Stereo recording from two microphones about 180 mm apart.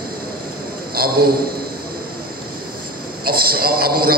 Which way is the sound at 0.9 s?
55° right (ahead or behind).